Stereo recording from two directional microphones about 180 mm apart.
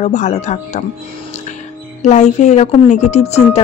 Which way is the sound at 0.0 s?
40° left (ahead or behind).